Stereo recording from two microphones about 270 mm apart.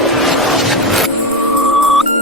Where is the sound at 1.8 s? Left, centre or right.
Centre.